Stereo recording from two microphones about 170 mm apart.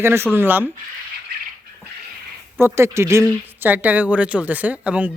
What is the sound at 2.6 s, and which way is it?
Speech, 15° right (ahead or behind).